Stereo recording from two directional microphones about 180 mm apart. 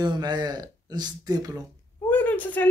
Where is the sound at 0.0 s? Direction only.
25° right (ahead or behind).